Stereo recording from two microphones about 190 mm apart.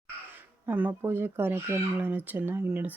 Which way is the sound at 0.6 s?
10° right (ahead or behind).